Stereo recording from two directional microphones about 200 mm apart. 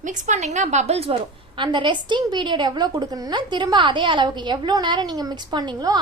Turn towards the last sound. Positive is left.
turn(degrees=-20)  # may be behind; listen again after turning